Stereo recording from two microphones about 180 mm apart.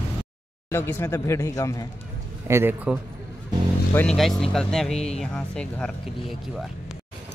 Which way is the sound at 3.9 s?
5° left (ahead or behind).